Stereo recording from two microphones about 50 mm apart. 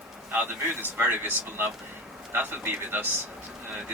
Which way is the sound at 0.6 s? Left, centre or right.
Right.